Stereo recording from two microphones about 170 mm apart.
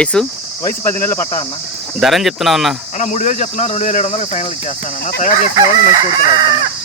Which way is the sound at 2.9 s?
45° left (ahead or behind).